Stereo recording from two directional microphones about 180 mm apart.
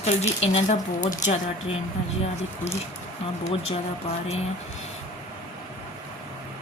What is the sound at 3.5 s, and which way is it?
Speech, 35° left (ahead or behind).